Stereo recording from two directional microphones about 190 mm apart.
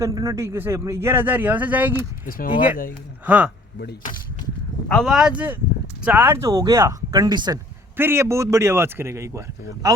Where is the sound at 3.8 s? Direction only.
45° left (ahead or behind).